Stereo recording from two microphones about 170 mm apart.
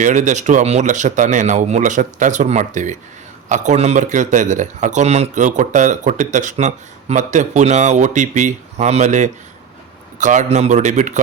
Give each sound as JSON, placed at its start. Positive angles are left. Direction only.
{"t": 0.0, "sound": "a man's voice", "side_deg": -45}